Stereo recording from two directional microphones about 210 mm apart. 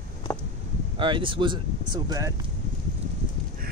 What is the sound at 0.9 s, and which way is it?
Speech, 25° right (ahead or behind).